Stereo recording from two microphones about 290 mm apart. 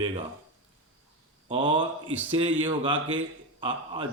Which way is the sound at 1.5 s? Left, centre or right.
Centre.